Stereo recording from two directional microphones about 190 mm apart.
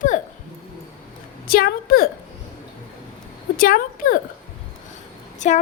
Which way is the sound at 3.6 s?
50° left (ahead or behind).